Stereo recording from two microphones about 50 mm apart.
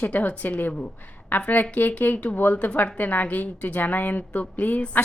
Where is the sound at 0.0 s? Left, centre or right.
Left.